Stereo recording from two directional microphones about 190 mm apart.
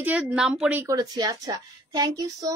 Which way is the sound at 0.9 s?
20° right (ahead or behind).